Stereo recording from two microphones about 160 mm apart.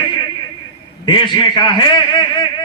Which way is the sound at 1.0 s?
30° left (ahead or behind).